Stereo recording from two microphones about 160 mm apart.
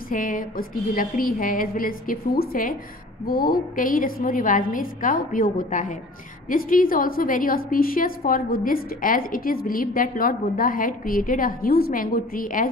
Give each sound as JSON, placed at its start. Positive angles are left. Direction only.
{"t": 0.1, "sound": "a woman's voice", "side_deg": 55}